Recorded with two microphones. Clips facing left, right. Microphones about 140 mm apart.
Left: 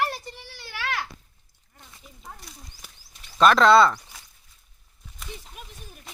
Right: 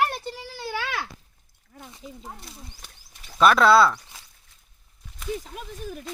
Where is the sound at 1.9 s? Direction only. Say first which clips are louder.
Right 4 dB; 25° right (ahead or behind).